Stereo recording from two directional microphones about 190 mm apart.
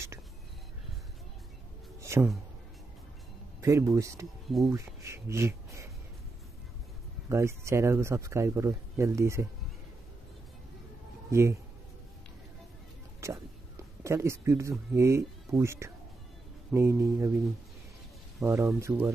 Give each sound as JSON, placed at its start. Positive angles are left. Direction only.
{"t": 2.0, "sound": "a sound", "side_deg": -15}
{"t": 3.6, "sound": "speech", "side_deg": -15}
{"t": 4.5, "sound": "speech", "side_deg": 0}
{"t": 4.7, "sound": "speech", "side_deg": -15}
{"t": 7.2, "sound": "speech", "side_deg": -15}
{"t": 11.2, "sound": "speech", "side_deg": -15}
{"t": 13.2, "sound": "speech", "side_deg": -15}
{"t": 18.4, "sound": "speech", "side_deg": -15}